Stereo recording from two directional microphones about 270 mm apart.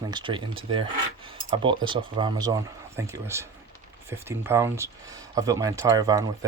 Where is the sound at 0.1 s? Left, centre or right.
Centre.